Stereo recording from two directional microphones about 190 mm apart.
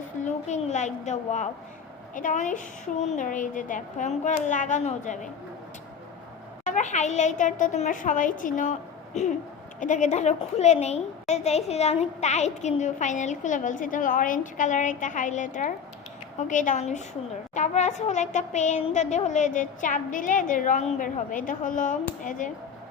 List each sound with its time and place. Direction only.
0.3 s a woman's voice: 35° left (ahead or behind)
6.7 s a woman's voice: 40° left (ahead or behind)
9.8 s a woman's voice: 40° left (ahead or behind)